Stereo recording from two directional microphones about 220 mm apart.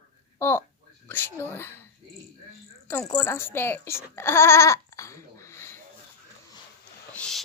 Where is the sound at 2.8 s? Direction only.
5° left (ahead or behind).